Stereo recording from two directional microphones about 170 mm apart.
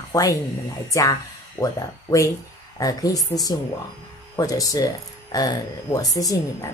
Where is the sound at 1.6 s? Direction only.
20° left (ahead or behind).